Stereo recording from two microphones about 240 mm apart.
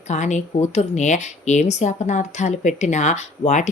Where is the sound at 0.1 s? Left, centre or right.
Left.